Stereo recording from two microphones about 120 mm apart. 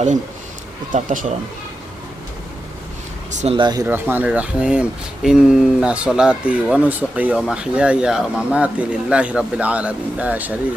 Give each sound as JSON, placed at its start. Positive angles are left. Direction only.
{"t": 0.9, "sound": "speech", "side_deg": -80}
{"t": 3.4, "sound": "speech", "side_deg": -50}
{"t": 4.1, "sound": "speech", "side_deg": -15}